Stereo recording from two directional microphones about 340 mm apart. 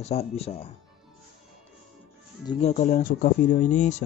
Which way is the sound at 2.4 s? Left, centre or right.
Centre.